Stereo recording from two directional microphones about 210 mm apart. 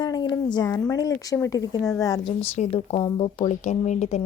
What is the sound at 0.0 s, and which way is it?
A woman's voice, 20° left (ahead or behind).